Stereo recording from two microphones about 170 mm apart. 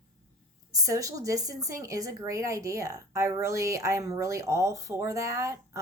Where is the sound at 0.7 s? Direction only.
20° right (ahead or behind).